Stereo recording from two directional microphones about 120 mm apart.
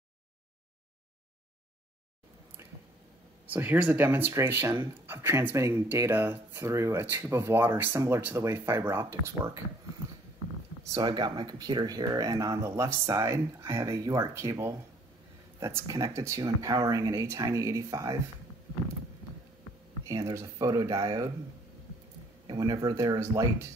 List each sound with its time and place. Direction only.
3.4 s speech: 15° right (ahead or behind)
10.8 s speech: 30° right (ahead or behind)
20.1 s speech: 30° right (ahead or behind)
22.5 s speech: 30° right (ahead or behind)